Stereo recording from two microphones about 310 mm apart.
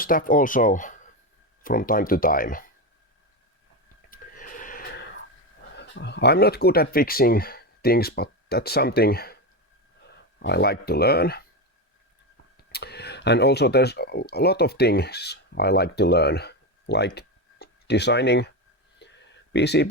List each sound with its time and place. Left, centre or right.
0.0 s speech: left
4.1 s a sound: left
5.7 s speech: left
10.4 s speech: left
12.5 s speech: left
17.2 s tick-tock: left
19.0 s a sound: left
19.5 s speech: left